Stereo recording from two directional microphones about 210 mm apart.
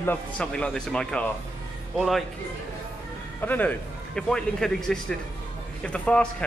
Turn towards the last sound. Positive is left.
turn(degrees=5)  # may be behind; listen again after turning